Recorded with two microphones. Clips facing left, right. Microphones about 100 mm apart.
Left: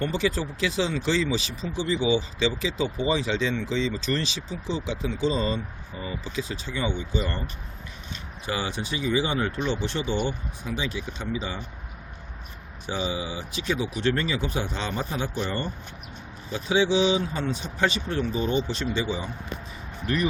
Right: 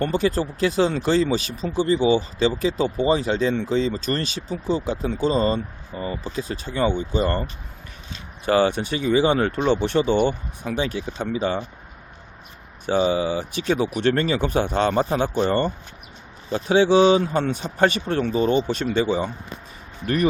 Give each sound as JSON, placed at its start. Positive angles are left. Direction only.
{"t": 0.0, "sound": "speech", "side_deg": -45}
{"t": 8.4, "sound": "speech", "side_deg": -55}
{"t": 12.8, "sound": "speech", "side_deg": -55}